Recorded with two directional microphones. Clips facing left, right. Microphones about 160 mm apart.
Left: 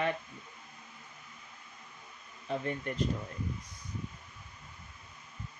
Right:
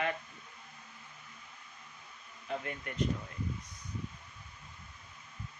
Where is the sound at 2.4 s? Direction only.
30° left (ahead or behind).